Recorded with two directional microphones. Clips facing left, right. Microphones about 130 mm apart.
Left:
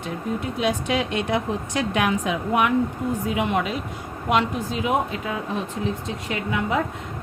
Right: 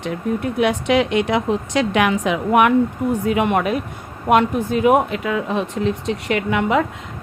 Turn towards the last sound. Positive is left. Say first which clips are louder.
# right 6 dB
turn(degrees=-80)